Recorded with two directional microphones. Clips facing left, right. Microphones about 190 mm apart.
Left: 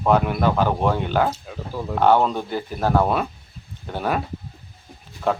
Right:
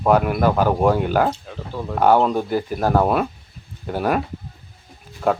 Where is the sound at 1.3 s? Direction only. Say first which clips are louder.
Right 2 dB; 5° left (ahead or behind).